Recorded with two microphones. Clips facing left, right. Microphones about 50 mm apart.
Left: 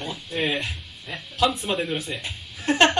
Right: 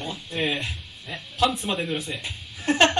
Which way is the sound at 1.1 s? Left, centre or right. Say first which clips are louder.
Left 1 dB; centre.